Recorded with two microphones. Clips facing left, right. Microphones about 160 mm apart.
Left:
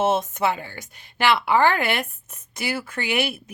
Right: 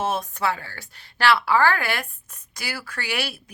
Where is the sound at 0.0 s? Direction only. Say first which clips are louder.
Left 4 dB; 25° left (ahead or behind).